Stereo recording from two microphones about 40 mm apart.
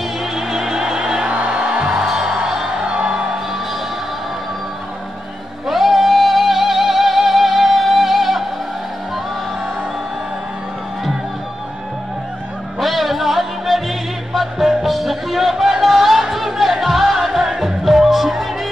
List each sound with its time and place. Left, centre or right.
0.2 s music: centre
1.3 s music: right
2.0 s music: centre
2.8 s music: right
5.7 s music: centre
12.8 s music: centre